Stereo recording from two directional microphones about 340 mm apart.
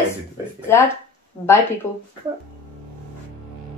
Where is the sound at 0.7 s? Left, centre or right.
Centre.